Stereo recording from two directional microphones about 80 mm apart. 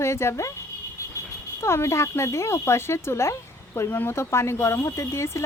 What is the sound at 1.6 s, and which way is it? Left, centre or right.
Speech, left.